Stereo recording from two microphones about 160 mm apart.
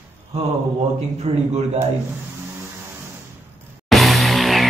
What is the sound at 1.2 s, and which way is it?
Speech, 40° right (ahead or behind).